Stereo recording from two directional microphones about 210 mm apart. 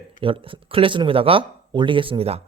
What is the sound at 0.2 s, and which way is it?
A man's voice, 25° right (ahead or behind).